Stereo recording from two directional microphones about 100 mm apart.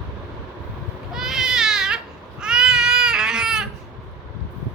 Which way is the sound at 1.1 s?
5° right (ahead or behind).